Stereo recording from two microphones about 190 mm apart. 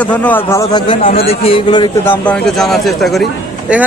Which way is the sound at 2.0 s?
10° left (ahead or behind).